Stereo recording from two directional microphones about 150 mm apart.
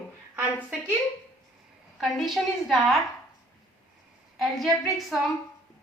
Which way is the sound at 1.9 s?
Centre (ahead or behind).